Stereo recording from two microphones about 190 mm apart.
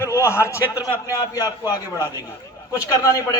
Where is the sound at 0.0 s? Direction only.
15° left (ahead or behind).